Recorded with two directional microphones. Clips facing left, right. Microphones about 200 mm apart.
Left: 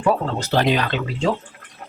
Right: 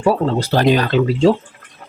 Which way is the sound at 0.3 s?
35° right (ahead or behind).